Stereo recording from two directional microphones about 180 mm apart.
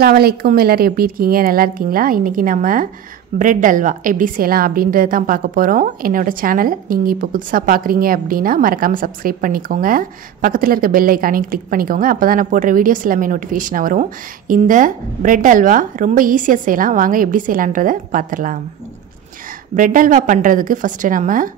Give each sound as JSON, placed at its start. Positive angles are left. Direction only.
{"t": 0.0, "sound": "a woman's voice", "side_deg": -60}
{"t": 19.7, "sound": "a woman's voice", "side_deg": -45}